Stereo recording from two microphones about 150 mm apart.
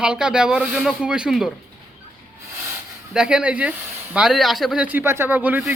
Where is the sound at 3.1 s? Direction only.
5° right (ahead or behind).